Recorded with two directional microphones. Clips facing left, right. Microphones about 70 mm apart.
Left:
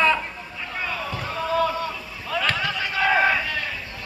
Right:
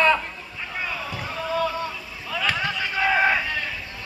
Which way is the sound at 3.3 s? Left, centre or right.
Centre.